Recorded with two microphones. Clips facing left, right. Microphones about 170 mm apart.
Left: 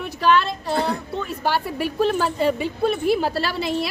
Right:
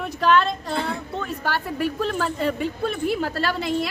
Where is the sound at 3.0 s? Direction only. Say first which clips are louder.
Left 3 dB; 80° left.